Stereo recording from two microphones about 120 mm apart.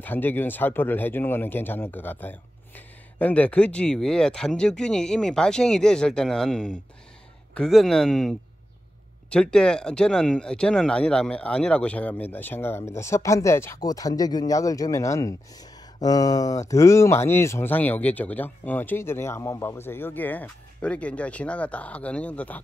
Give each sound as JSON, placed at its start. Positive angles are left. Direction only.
{"t": 0.0, "sound": "speech", "side_deg": 15}